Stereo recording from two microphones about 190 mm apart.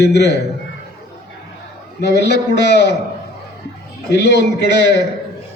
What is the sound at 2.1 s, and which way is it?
Speech, 60° left (ahead or behind).